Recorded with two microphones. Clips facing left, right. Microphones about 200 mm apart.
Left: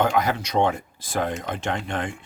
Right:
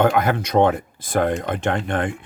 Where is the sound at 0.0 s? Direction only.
55° right (ahead or behind).